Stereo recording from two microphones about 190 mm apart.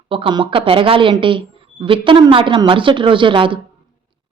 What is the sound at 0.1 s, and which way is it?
Speech, 25° right (ahead or behind).